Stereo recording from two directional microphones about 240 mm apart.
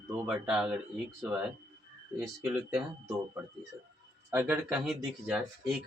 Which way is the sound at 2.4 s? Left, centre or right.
Centre.